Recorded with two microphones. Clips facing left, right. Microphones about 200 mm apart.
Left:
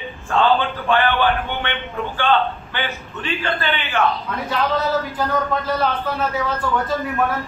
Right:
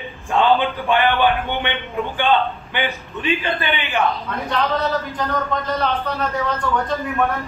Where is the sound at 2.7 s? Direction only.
15° right (ahead or behind).